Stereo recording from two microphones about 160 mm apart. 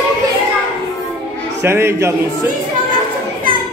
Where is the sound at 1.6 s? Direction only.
15° right (ahead or behind).